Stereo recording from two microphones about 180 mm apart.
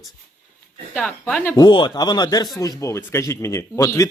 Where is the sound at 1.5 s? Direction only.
25° left (ahead or behind).